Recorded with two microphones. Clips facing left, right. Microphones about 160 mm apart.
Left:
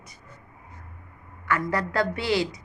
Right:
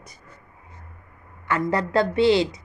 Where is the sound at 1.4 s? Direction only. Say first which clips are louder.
Right 3 dB; 25° right (ahead or behind).